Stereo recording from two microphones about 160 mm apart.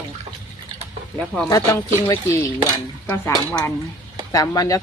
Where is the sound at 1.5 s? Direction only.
20° left (ahead or behind).